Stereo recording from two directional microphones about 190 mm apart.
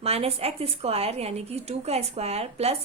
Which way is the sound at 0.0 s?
30° right (ahead or behind).